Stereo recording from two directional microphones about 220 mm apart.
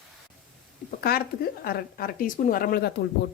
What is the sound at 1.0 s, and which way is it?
Speech, 45° left (ahead or behind).